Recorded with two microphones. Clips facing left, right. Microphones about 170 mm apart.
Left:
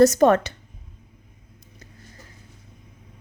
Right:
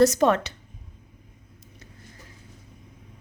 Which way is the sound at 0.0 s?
45° left (ahead or behind).